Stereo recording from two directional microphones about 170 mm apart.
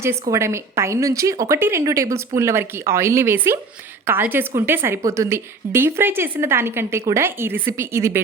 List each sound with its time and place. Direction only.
0.0 s a woman's voice: 15° right (ahead or behind)